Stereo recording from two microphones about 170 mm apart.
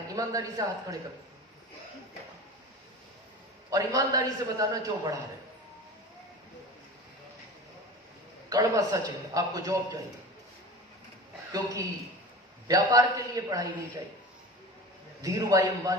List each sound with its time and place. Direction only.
0.2 s a man's voice: 20° right (ahead or behind)
3.7 s a man's voice: 20° right (ahead or behind)
8.4 s a man's voice: 20° right (ahead or behind)
11.5 s a man's voice: 20° right (ahead or behind)
15.2 s a man's voice: 20° right (ahead or behind)